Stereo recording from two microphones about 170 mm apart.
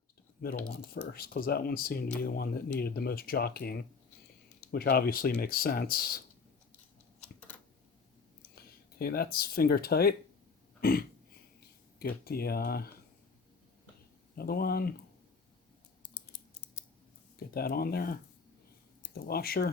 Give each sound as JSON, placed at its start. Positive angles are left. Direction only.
{"t": 0.6, "sound": "speech", "side_deg": 70}
{"t": 8.4, "sound": "speech", "side_deg": 65}
{"t": 10.8, "sound": "throat clearing", "side_deg": 60}
{"t": 11.9, "sound": "speech", "side_deg": 65}
{"t": 14.3, "sound": "speech", "side_deg": 60}
{"t": 17.5, "sound": "speech", "side_deg": 65}